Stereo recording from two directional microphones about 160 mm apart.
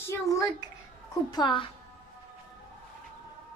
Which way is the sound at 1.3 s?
30° left (ahead or behind).